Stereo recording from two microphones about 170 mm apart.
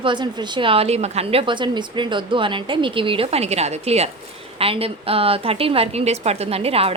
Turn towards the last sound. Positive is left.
turn(degrees=-35)  # may be behind; listen again after turning